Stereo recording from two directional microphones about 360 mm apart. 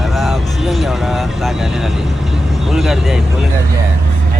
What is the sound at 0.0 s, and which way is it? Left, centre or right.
Vehicle, centre.